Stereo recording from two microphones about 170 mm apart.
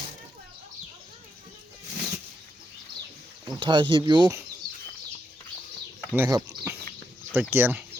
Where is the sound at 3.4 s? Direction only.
30° right (ahead or behind).